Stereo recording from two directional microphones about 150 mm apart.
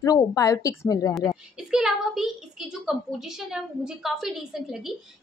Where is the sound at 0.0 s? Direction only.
20° left (ahead or behind).